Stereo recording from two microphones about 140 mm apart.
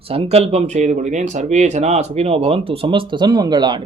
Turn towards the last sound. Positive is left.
turn(degrees=-30)  # may be behind; listen again after turning